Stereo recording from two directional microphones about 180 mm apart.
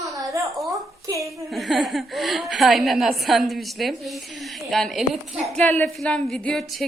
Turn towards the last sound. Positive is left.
turn(degrees=0)  # may be behind; listen again after turning